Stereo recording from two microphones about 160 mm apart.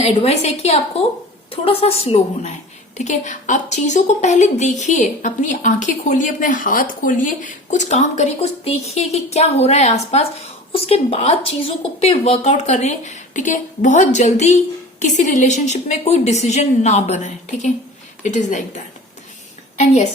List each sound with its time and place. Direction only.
0.0 s a woman's voice: 40° left (ahead or behind)